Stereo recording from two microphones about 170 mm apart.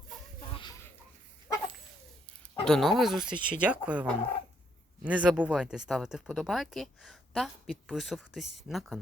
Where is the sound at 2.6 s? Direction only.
5° left (ahead or behind).